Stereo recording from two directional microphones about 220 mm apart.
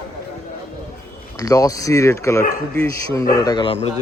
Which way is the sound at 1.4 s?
15° left (ahead or behind).